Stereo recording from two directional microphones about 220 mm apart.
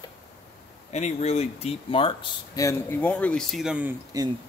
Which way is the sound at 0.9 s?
30° left (ahead or behind).